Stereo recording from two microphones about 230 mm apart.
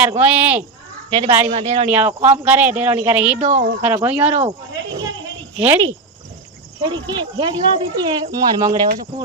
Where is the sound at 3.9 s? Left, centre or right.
Centre.